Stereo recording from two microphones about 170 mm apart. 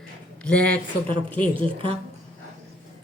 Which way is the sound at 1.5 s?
30° right (ahead or behind).